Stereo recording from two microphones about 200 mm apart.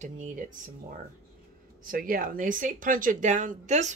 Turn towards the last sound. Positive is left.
turn(degrees=-35)  # may be behind; listen again after turning